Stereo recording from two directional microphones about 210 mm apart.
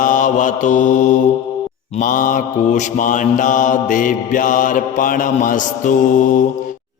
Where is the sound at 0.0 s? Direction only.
40° left (ahead or behind).